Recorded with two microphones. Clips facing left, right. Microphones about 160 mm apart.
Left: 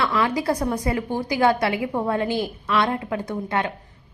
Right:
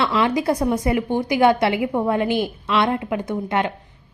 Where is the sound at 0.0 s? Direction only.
25° right (ahead or behind).